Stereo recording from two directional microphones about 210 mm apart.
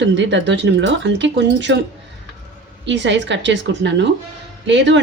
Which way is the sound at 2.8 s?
60° right (ahead or behind).